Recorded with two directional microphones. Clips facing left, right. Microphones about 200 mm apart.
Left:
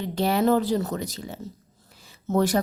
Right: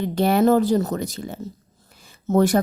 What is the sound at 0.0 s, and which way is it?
Speech, 50° right (ahead or behind).